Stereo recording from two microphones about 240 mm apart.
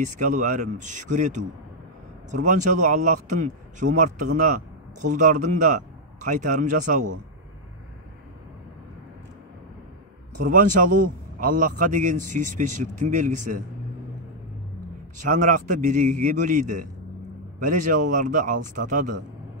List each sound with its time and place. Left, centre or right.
0.0 s a man's voice: right
10.4 s a man's voice: right
15.2 s a man's voice: right